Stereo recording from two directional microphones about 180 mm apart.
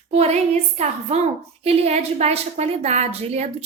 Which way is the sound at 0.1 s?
35° right (ahead or behind).